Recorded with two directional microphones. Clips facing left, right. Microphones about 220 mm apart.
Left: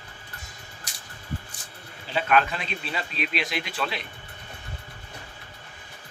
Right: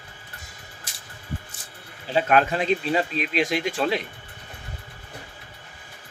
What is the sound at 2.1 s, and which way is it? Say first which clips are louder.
Speech: right 3 dB; 40° right (ahead or behind).